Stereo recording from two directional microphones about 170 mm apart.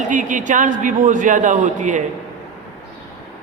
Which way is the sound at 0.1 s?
50° right (ahead or behind).